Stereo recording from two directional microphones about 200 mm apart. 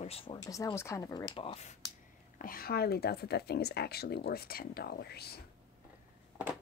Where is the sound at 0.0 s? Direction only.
30° left (ahead or behind).